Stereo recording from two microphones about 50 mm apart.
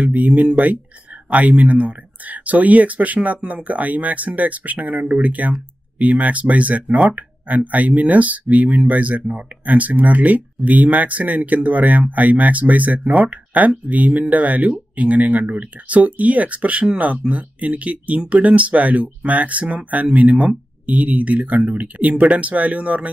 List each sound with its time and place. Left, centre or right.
0.0 s speech: right